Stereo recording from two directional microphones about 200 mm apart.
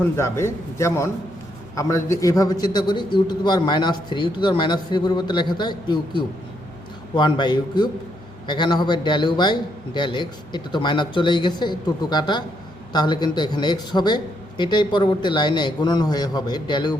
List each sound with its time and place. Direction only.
0.0 s a man's voice: 15° left (ahead or behind)